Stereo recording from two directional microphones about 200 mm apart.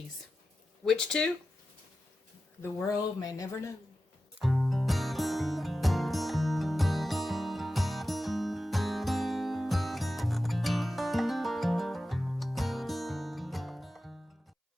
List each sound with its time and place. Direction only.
0.9 s speech: 5° left (ahead or behind)
2.6 s speech: 10° left (ahead or behind)
4.4 s music: centre (ahead or behind)